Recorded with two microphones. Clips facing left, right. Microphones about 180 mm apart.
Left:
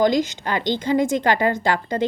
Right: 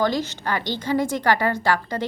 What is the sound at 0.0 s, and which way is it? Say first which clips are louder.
A woman's voice: left 4 dB; 15° left (ahead or behind).